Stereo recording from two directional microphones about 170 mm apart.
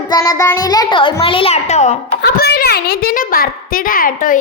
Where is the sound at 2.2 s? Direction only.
70° left (ahead or behind).